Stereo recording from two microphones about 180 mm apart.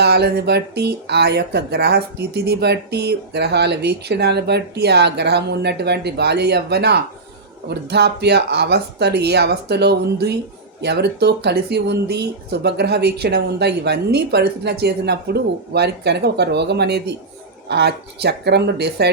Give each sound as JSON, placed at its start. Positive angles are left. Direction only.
{"t": 0.0, "sound": "speech", "side_deg": -65}